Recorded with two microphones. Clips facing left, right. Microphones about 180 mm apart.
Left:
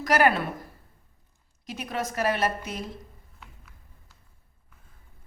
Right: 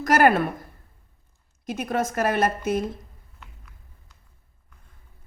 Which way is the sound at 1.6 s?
50° right (ahead or behind).